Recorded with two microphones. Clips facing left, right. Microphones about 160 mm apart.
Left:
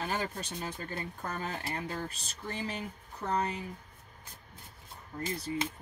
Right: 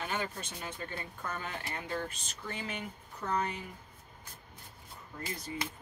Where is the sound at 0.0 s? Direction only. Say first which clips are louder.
Left 2 dB; 35° left (ahead or behind).